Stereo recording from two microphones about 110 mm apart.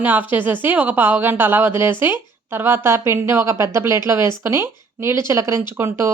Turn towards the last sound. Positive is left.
turn(degrees=-25)  # may be behind; listen again after turning